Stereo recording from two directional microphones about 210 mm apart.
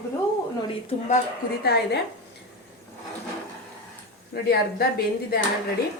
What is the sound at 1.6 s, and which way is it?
Speech, 50° left (ahead or behind).